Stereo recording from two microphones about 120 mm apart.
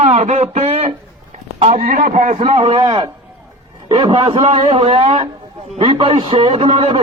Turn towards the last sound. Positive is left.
turn(degrees=-45)  # may be behind; listen again after turning